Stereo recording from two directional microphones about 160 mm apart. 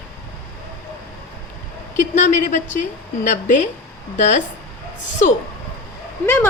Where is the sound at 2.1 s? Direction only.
50° left (ahead or behind).